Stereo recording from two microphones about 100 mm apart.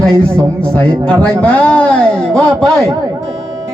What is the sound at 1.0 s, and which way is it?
Speech, 10° left (ahead or behind).